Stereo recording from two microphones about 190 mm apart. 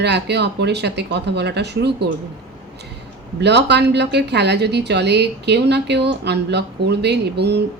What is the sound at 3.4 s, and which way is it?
A woman's voice, 65° right (ahead or behind).